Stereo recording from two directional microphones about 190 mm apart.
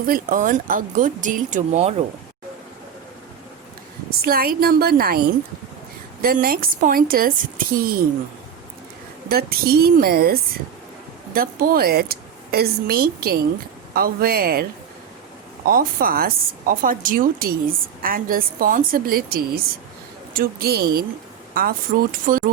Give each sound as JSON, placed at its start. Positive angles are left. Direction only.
{"t": 0.0, "sound": "a woman's voice", "side_deg": -45}
{"t": 4.2, "sound": "a woman's voice", "side_deg": -50}
{"t": 6.2, "sound": "a woman's voice", "side_deg": -50}
{"t": 9.3, "sound": "a woman's voice", "side_deg": -55}
{"t": 15.6, "sound": "a woman's voice", "side_deg": -50}